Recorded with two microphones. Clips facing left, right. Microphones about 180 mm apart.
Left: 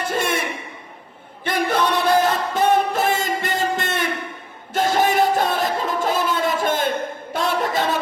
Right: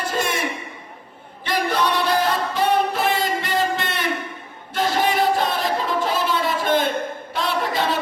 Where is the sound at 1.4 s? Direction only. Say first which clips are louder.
Left 1 dB; 50° left (ahead or behind).